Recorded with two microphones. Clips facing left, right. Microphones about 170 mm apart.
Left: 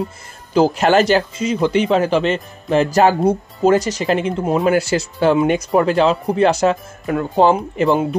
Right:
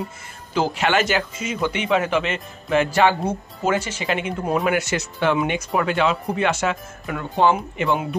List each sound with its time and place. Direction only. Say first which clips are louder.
0.6 s speech: left 7 dB; 40° left (ahead or behind)
4.5 s speech: left 5 dB; 25° left (ahead or behind)